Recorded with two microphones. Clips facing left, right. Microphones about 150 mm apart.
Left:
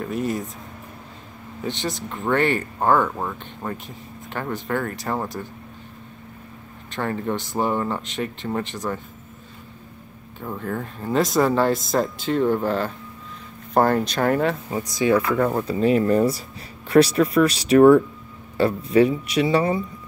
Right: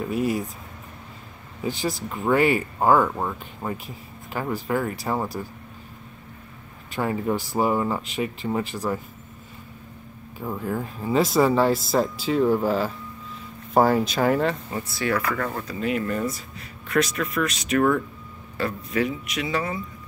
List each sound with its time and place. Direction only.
0.0 s speech: 5° right (ahead or behind)
1.6 s speech: 5° right (ahead or behind)
6.9 s speech: 5° right (ahead or behind)
10.4 s speech: 5° right (ahead or behind)
14.7 s a man's voice: 15° left (ahead or behind); by 19.8 s 30° left (ahead or behind)